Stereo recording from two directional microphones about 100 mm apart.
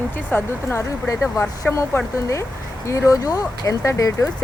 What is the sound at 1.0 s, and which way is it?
Speech, 30° left (ahead or behind).